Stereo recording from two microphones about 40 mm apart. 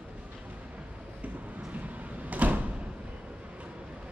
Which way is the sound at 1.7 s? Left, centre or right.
Right.